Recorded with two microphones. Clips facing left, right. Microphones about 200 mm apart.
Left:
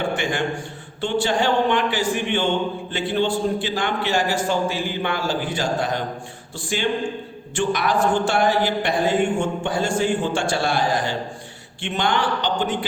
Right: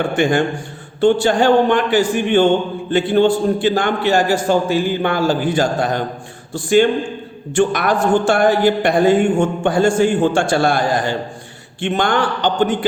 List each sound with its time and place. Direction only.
0.2 s a man's voice: 45° right (ahead or behind)